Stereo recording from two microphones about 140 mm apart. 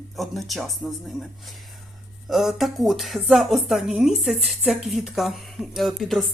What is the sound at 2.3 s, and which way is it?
Speech, centre (ahead or behind).